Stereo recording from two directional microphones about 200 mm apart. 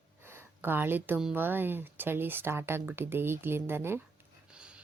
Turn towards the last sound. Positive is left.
turn(degrees=-5)  # may be behind; listen again after turning